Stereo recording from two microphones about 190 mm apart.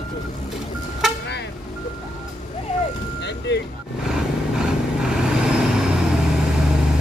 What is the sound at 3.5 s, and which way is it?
Vehicle, 65° left (ahead or behind).